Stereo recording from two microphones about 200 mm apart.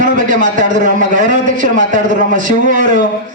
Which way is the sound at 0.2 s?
40° right (ahead or behind).